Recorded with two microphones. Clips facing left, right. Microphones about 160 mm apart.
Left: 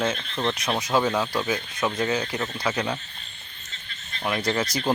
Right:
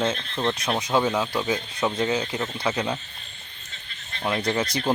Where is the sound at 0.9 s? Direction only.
10° right (ahead or behind).